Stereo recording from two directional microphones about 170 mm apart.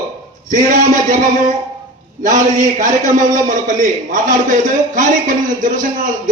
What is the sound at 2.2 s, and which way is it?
A man's voice, 50° right (ahead or behind).